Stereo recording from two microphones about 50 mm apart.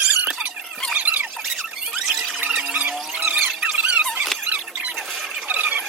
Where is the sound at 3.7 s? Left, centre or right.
Right.